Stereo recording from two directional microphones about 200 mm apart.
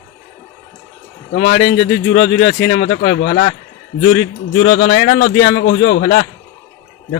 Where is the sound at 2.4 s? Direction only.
70° left (ahead or behind).